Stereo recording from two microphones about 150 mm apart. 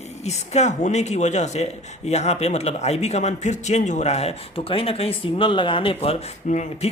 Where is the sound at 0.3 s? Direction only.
50° left (ahead or behind).